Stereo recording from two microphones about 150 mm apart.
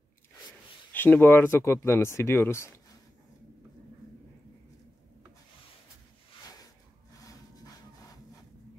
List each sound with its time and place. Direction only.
0.9 s speech: 10° left (ahead or behind)